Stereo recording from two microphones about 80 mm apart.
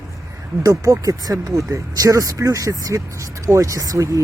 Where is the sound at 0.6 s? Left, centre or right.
Right.